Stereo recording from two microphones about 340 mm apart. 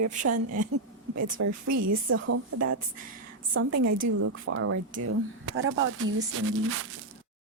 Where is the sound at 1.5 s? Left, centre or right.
Right.